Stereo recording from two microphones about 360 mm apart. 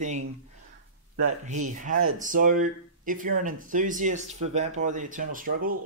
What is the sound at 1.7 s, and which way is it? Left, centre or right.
Speech, right.